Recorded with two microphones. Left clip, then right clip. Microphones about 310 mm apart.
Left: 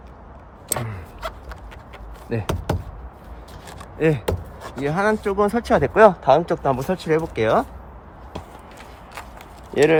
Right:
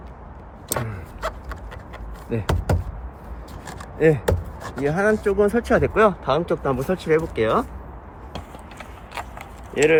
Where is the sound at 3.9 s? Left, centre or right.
Left.